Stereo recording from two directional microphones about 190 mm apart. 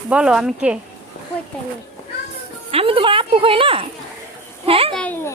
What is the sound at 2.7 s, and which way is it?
A woman's voice, 30° right (ahead or behind).